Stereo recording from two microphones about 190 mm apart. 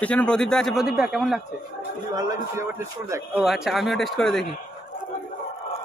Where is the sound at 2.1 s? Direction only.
15° right (ahead or behind).